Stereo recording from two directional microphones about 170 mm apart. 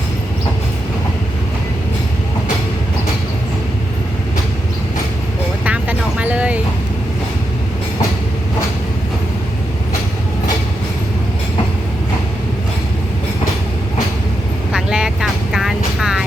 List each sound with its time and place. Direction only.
5.6 s vehicle: 10° right (ahead or behind)
14.7 s vehicle: 5° right (ahead or behind)